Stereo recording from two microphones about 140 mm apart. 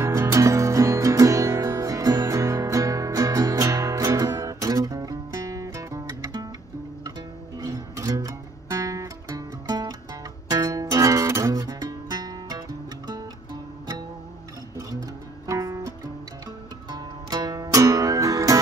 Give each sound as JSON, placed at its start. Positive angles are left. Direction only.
{"t": 0.0, "sound": "music", "side_deg": -20}
{"t": 7.5, "sound": "music", "side_deg": -25}
{"t": 14.8, "sound": "music", "side_deg": -25}
{"t": 16.9, "sound": "music", "side_deg": -30}